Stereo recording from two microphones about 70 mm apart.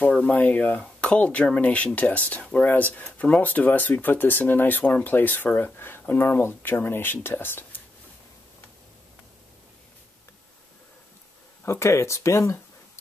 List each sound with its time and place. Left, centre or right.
0.3 s speech: left
11.6 s speech: left